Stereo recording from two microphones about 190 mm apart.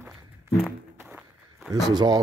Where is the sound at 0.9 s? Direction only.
10° right (ahead or behind).